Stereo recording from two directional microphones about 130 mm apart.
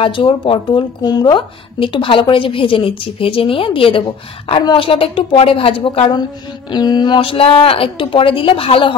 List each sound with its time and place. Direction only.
0.0 s a woman's voice: 40° left (ahead or behind)